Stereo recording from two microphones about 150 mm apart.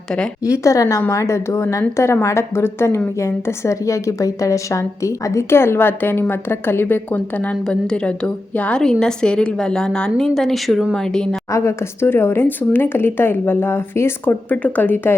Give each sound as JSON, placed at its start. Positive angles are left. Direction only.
{"t": 0.4, "sound": "a woman's voice", "side_deg": 20}
{"t": 11.5, "sound": "a woman's voice", "side_deg": 15}